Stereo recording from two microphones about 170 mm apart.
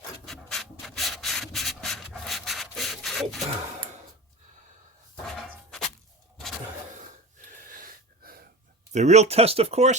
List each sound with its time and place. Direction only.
0.3 s rub: 5° left (ahead or behind)
7.8 s gasp: 60° right (ahead or behind)
8.9 s speech: 40° right (ahead or behind)